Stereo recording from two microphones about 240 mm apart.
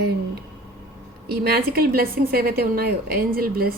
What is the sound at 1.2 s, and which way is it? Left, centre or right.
A woman's voice, right.